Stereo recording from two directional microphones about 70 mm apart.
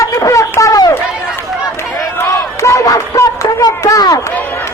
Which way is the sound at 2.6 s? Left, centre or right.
Left.